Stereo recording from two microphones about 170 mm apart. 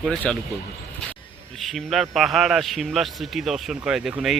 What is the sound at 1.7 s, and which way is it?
A man's voice, centre (ahead or behind).